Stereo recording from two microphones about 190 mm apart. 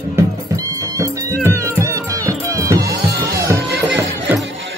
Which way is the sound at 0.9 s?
15° right (ahead or behind).